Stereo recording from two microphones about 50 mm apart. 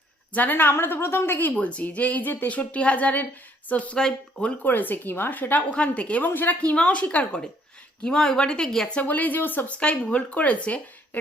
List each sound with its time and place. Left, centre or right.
0.3 s a woman's voice: left
1.5 s speech: left
3.9 s speech: centre
4.6 s a woman's voice: left
5.7 s speech: left
6.2 s a woman's voice: left
6.6 s speech: left
8.0 s speech: centre
9.0 s a woman's voice: left
9.6 s speech: left